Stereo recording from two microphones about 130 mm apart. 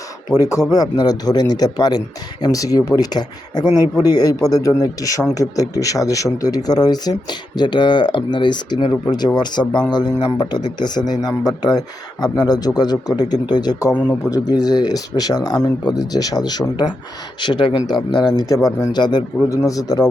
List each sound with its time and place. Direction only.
0.3 s a man's voice: 25° left (ahead or behind)